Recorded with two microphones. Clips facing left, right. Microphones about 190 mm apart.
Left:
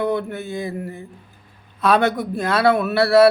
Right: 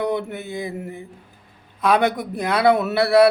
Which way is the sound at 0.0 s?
20° right (ahead or behind).